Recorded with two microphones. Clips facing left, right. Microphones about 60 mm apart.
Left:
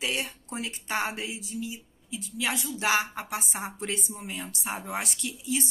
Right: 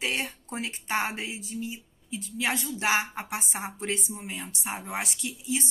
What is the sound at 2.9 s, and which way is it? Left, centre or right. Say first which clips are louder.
Speech: even; right.